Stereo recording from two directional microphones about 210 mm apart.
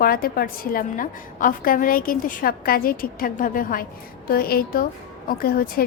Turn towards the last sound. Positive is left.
turn(degrees=45)  # may be behind; listen again after turning